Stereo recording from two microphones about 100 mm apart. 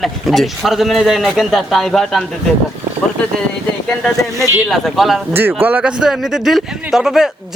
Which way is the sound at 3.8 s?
5° left (ahead or behind).